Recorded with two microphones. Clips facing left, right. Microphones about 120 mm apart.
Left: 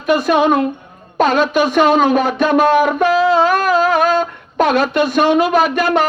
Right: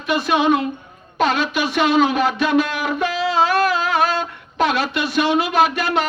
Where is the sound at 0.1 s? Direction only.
45° left (ahead or behind).